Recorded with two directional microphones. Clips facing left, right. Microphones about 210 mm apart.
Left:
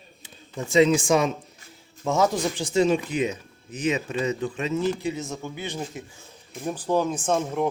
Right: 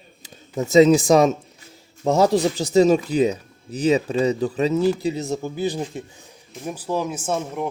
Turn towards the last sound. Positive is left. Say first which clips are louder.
# left 1 dB
turn(degrees=-5)  # may be behind; listen again after turning